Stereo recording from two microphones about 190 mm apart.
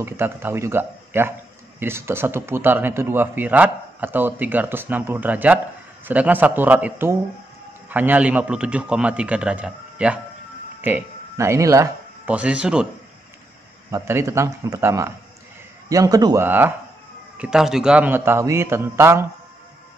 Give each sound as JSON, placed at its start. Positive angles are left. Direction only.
{"t": 0.0, "sound": "a man's voice", "side_deg": -10}
{"t": 13.8, "sound": "a man's voice", "side_deg": -15}